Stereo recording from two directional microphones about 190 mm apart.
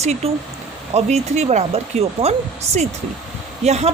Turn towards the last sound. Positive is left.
turn(degrees=-35)  # may be behind; listen again after turning